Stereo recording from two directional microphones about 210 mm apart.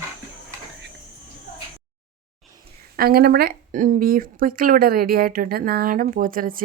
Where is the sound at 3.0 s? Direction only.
45° right (ahead or behind).